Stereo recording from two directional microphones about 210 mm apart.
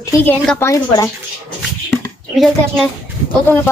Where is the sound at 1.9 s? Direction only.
Centre (ahead or behind).